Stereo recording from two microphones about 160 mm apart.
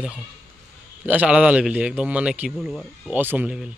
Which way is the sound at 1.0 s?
10° right (ahead or behind).